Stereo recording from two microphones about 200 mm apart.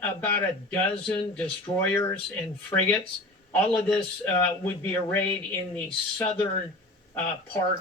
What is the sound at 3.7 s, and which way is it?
Speech, 25° left (ahead or behind).